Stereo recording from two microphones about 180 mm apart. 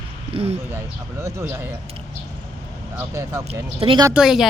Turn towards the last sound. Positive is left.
turn(degrees=-5)  # may be behind; listen again after turning